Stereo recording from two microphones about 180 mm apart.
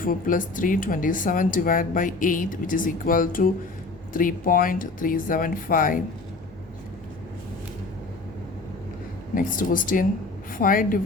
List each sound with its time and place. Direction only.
0.0 s speech: 50° left (ahead or behind)
9.3 s speech: 50° left (ahead or behind)